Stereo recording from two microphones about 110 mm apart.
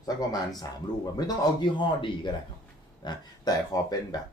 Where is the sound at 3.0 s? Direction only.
35° left (ahead or behind).